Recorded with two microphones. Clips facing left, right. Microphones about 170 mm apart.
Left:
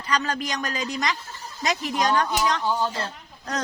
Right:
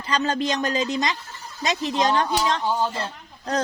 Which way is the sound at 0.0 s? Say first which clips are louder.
Right 3 dB; 25° right (ahead or behind).